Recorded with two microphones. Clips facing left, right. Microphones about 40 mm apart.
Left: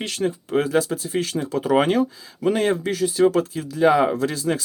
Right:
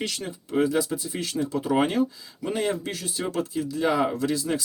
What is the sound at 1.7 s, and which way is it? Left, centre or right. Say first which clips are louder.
Speech: left 5 dB; left.